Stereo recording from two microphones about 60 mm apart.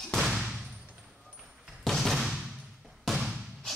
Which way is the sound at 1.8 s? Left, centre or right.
Centre.